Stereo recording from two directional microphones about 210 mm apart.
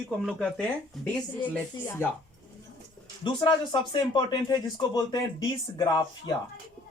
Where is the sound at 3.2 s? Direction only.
20° left (ahead or behind).